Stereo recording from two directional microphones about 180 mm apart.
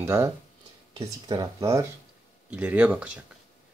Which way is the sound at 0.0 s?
15° right (ahead or behind).